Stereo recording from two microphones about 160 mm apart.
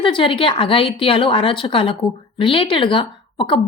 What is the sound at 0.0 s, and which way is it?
A woman's voice, 30° left (ahead or behind).